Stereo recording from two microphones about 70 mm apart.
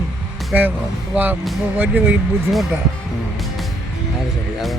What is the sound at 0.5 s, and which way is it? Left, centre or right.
Speech, right.